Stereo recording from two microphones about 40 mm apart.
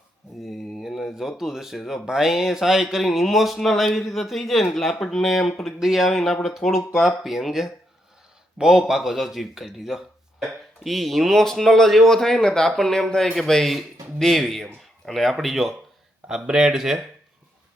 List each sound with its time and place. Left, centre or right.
0.4 s a sound: centre
2.0 s speech: centre
6.1 s speech: centre
16.5 s speech: centre